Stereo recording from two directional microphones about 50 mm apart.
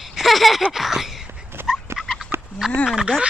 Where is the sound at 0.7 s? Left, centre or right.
Centre.